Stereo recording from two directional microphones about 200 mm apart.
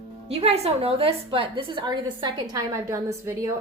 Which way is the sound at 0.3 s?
30° right (ahead or behind).